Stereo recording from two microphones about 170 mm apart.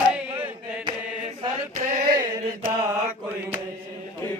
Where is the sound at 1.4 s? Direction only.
45° right (ahead or behind).